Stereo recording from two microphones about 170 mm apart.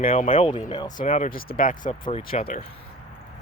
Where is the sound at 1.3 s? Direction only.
55° left (ahead or behind).